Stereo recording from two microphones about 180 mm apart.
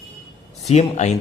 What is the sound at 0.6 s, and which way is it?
Speech, 35° left (ahead or behind).